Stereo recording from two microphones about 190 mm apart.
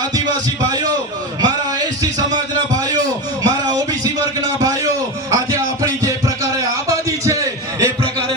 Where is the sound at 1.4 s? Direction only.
20° right (ahead or behind).